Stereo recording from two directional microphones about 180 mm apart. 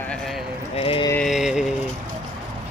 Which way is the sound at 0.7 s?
30° left (ahead or behind).